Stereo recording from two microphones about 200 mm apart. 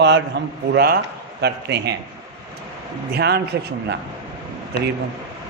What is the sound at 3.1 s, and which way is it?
Speech, 50° right (ahead or behind).